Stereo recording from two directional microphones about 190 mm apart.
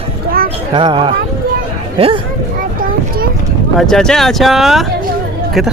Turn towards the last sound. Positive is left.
turn(degrees=0)  # may be behind; listen again after turning